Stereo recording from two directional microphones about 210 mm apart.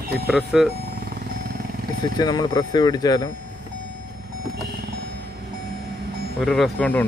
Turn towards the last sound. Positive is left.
turn(degrees=5)  # may be behind; listen again after turning